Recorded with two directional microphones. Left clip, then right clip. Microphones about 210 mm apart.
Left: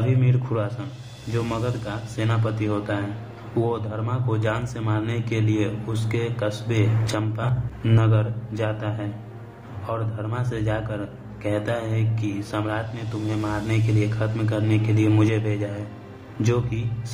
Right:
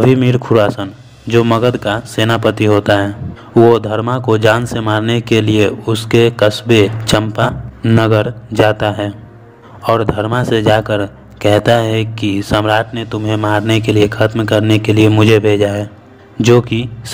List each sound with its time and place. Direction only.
0.1 s a man's voice: 40° right (ahead or behind)